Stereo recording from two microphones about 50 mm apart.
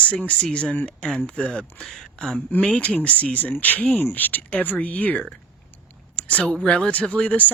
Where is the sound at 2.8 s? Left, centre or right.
Left.